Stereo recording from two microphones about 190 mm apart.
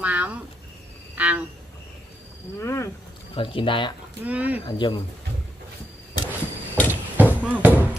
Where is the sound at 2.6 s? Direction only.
15° left (ahead or behind).